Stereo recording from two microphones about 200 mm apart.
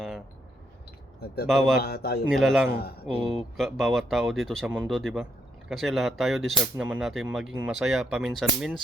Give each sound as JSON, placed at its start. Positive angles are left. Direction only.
{"t": 1.5, "sound": "speech", "side_deg": 0}
{"t": 1.8, "sound": "a man's voice", "side_deg": 50}
{"t": 2.3, "sound": "speech", "side_deg": 0}